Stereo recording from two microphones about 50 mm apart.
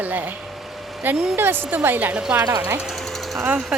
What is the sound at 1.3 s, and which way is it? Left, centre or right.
Speech, right.